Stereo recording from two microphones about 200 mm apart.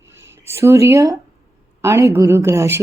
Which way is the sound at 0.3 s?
15° right (ahead or behind).